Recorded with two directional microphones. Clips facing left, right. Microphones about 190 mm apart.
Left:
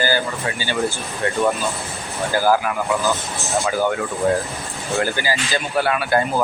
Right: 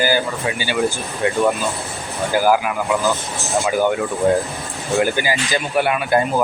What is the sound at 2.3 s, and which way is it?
Speech, 15° right (ahead or behind).